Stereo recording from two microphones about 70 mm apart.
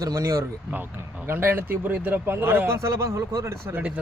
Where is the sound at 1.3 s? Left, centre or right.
Right.